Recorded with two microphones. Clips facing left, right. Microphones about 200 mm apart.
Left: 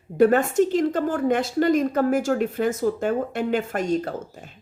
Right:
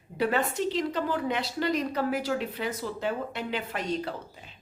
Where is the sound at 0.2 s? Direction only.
45° left (ahead or behind).